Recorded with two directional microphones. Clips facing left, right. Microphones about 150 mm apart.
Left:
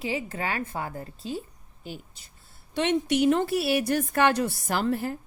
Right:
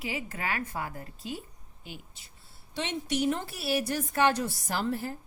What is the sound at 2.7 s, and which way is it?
Speech, 60° left (ahead or behind).